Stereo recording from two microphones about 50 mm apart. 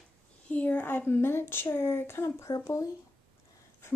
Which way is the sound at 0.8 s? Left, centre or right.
Left.